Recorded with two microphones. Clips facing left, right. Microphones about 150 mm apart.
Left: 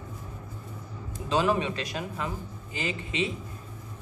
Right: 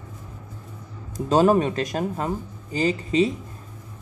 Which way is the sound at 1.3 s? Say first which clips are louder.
Right 8 dB; 45° right (ahead or behind).